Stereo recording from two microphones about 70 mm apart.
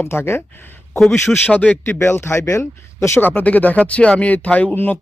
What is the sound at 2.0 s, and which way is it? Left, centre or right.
Speech, left.